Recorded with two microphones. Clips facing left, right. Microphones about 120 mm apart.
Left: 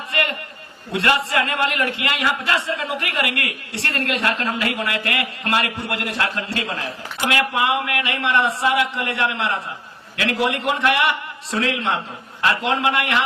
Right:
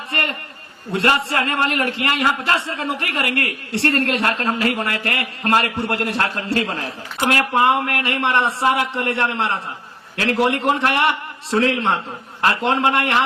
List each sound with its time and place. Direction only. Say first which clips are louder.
0.9 s a man's voice: right 1 dB; 30° right (ahead or behind)
4.2 s speech: right 1 dB; 45° right (ahead or behind)
4.4 s a man's voice: right 3 dB; 30° right (ahead or behind)